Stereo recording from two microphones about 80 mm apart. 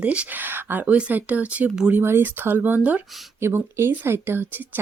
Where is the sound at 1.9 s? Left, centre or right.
Right.